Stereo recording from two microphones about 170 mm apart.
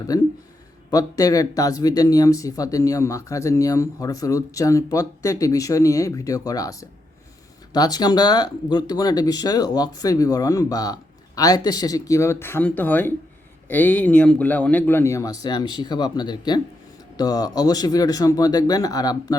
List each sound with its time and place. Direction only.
0.1 s a man's voice: 20° left (ahead or behind)